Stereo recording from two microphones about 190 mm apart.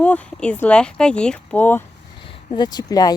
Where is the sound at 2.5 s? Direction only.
20° left (ahead or behind).